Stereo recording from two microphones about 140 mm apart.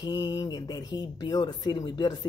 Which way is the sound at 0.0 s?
30° left (ahead or behind).